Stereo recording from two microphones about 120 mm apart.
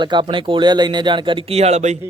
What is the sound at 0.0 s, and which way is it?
Speech, 40° right (ahead or behind).